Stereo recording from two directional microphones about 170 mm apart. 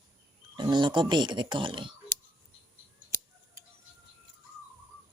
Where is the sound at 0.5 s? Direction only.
25° right (ahead or behind).